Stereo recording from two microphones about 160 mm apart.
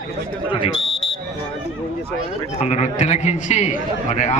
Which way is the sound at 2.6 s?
45° left (ahead or behind).